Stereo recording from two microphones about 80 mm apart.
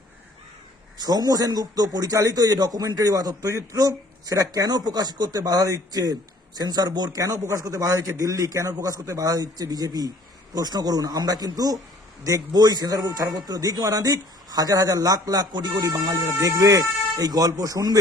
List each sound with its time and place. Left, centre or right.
0.9 s a man's voice: right